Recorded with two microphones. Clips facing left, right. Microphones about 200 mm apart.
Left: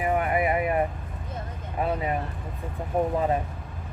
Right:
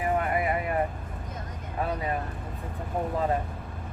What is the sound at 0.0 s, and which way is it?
Vehicle, 20° left (ahead or behind).